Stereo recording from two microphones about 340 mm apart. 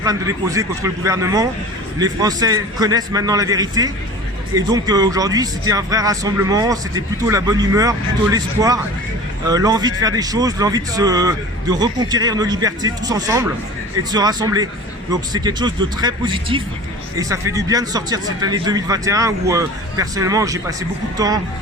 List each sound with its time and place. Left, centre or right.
0.0 s speech: centre